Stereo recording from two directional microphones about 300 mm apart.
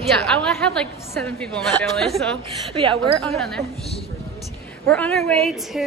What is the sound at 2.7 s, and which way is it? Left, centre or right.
Speech, centre.